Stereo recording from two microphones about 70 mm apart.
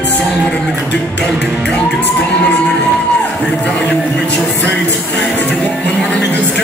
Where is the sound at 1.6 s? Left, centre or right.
Centre.